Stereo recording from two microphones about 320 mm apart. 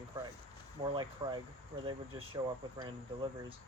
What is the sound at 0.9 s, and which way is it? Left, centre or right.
Speech, centre.